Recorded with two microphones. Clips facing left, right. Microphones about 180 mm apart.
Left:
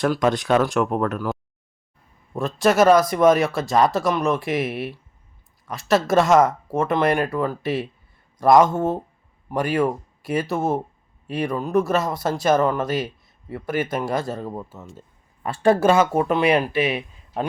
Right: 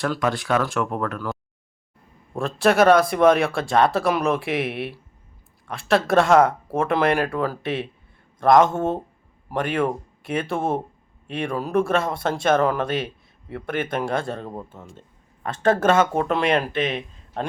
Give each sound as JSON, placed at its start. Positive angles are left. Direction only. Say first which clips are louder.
{"t": 0.0, "sound": "speech", "louder": "left 4 dB", "side_deg": 20}
{"t": 2.6, "sound": "speech", "louder": "even", "side_deg": 0}